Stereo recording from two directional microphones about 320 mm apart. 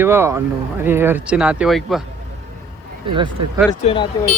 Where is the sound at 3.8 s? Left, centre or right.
Centre.